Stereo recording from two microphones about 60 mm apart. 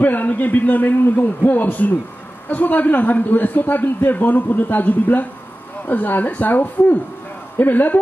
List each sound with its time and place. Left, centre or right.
0.0 s a man's voice: left